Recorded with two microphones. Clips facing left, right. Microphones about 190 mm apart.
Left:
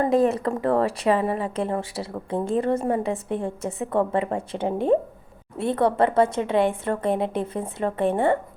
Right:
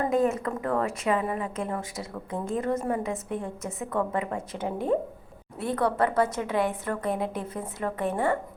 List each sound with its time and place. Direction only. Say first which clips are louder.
0.1 s a woman's voice: left 4 dB; 35° left (ahead or behind)